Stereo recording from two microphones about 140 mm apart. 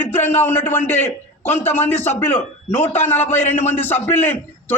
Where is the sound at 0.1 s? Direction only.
15° left (ahead or behind).